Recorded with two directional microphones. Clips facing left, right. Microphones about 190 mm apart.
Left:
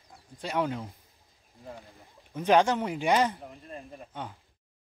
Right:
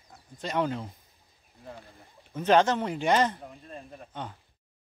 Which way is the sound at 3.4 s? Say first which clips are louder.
Even; centre (ahead or behind).